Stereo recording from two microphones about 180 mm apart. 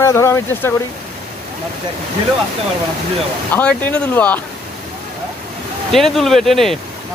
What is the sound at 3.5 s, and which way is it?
Speech, 10° left (ahead or behind).